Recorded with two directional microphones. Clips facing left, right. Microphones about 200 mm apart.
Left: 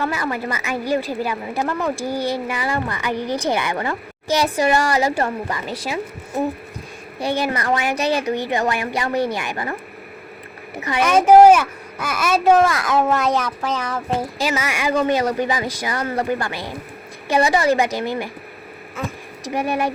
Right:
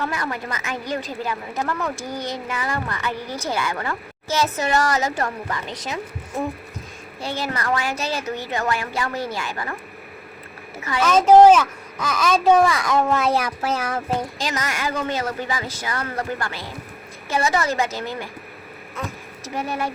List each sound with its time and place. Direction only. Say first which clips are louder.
0.0 s a woman's voice: left 4 dB; 5° left (ahead or behind)
7.2 s a woman's voice: left 5 dB; 15° left (ahead or behind)
9.1 s speech: left 7 dB; 65° left (ahead or behind)
9.4 s speech: left 3 dB; 20° left (ahead or behind)
10.8 s a woman's voice: left 1 dB; 15° left (ahead or behind); by 14.0 s 10° right (ahead or behind)
14.2 s a woman's voice: left 4 dB; 10° left (ahead or behind)
19.5 s a woman's voice: left 5 dB; 15° left (ahead or behind)